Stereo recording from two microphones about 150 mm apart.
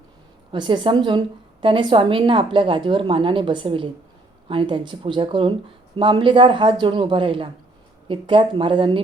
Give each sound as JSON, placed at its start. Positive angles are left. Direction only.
{"t": 0.5, "sound": "a woman's voice", "side_deg": -30}